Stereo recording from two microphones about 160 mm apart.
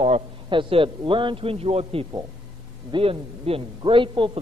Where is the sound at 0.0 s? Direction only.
35° right (ahead or behind).